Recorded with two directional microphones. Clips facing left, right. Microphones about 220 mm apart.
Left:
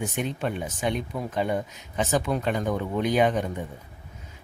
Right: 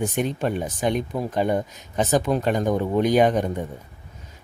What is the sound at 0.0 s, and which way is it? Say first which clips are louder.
Speech: right 5 dB; 40° right (ahead or behind).